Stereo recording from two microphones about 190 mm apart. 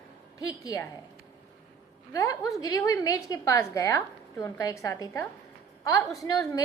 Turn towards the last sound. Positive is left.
turn(degrees=15)  # may be behind; listen again after turning